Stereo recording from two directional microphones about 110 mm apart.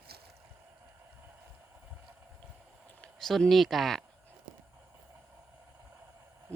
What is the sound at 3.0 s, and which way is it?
Speech, 5° left (ahead or behind).